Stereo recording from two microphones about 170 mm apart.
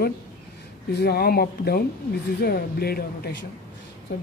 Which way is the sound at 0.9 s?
65° left (ahead or behind).